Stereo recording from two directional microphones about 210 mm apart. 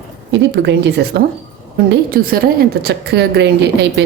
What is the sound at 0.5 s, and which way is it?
A woman's voice, 55° right (ahead or behind).